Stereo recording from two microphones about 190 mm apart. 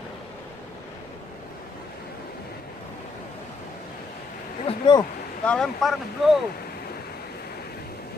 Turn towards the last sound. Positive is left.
turn(degrees=0)  # may be behind; listen again after turning